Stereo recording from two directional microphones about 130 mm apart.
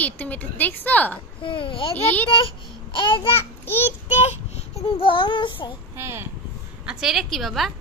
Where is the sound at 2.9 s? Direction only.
40° left (ahead or behind).